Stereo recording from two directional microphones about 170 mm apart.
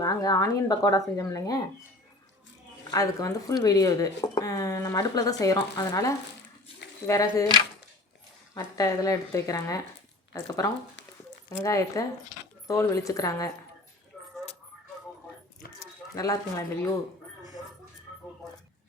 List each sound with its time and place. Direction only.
0.0 s speech: 20° left (ahead or behind)
2.9 s speech: 20° left (ahead or behind)
8.5 s speech: 20° left (ahead or behind)
15.8 s speech: 20° left (ahead or behind)